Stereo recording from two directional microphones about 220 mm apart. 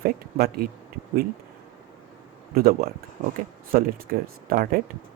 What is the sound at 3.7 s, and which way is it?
A man's voice, 40° right (ahead or behind).